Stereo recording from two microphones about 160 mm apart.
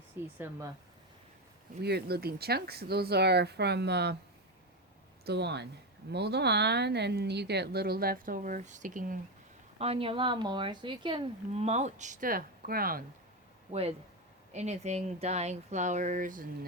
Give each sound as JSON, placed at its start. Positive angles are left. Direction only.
{"t": 0.1, "sound": "speech", "side_deg": -15}
{"t": 1.8, "sound": "speech", "side_deg": -90}
{"t": 5.2, "sound": "speech", "side_deg": -90}
{"t": 9.7, "sound": "speech", "side_deg": -40}
{"t": 11.6, "sound": "speech", "side_deg": -45}
{"t": 14.5, "sound": "speech", "side_deg": -45}